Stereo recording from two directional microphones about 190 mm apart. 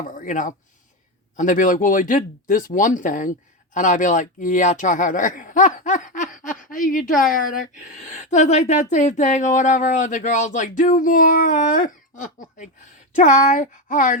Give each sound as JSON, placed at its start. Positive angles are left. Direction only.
{"t": 0.1, "sound": "a woman's voice", "side_deg": 45}